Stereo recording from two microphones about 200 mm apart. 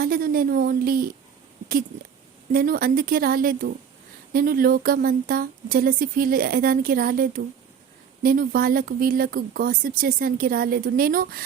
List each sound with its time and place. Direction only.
0.0 s speech: 45° right (ahead or behind)
2.5 s speech: 45° right (ahead or behind)